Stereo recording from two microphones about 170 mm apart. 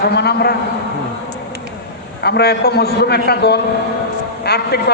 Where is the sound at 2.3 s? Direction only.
70° left (ahead or behind).